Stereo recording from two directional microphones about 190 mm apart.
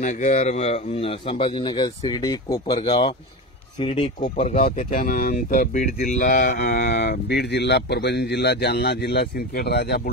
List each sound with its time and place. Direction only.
0.0 s speech: 40° left (ahead or behind)
4.4 s speech: 45° left (ahead or behind)